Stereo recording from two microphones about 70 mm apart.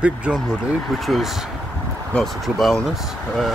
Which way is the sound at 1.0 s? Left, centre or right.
Centre.